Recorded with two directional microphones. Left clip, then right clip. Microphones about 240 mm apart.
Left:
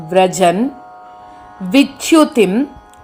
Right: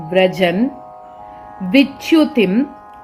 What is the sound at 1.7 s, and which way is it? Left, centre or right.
Speech, left.